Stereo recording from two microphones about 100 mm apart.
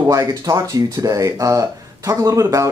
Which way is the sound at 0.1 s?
35° right (ahead or behind).